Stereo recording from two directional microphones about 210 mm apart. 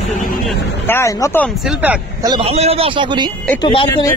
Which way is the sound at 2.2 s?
25° right (ahead or behind).